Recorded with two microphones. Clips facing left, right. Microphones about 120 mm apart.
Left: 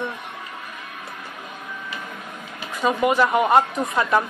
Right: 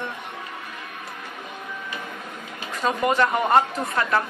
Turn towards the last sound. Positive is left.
turn(degrees=15)  # may be behind; listen again after turning